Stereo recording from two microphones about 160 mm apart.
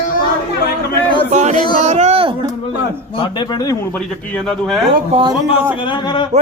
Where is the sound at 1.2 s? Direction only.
45° right (ahead or behind).